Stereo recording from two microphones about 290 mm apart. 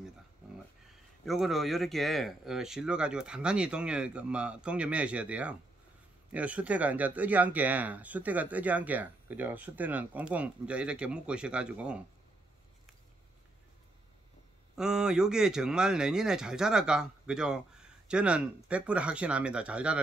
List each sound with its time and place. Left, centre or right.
1.2 s a man's voice: centre
14.8 s a man's voice: centre